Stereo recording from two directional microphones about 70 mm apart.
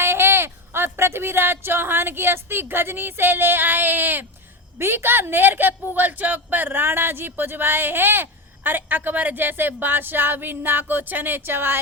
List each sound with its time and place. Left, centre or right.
0.0 s a woman's voice: right